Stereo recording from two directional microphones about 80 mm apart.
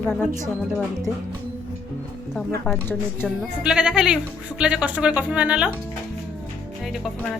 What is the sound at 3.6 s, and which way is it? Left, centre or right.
Speech, centre.